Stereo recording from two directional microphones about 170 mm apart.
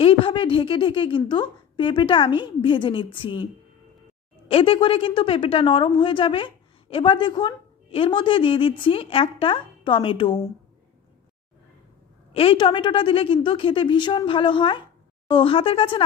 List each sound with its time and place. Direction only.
0.0 s a woman's voice: 30° left (ahead or behind)
12.3 s a woman's voice: 35° left (ahead or behind)